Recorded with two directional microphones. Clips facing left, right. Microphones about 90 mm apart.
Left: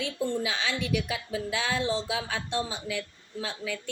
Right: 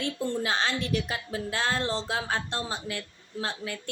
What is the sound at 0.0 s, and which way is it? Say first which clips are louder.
A woman's voice: even; 50° right (ahead or behind).